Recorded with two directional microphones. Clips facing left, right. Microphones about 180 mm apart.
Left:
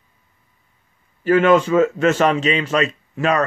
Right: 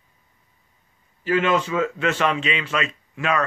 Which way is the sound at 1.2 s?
50° left (ahead or behind).